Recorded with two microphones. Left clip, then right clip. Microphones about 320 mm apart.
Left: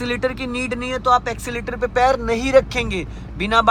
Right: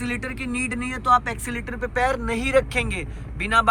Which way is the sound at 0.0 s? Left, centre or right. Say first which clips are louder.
Left 7 dB; centre.